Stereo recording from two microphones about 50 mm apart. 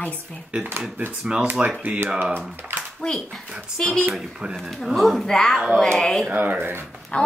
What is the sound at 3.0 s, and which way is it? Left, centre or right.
A woman's voice, centre.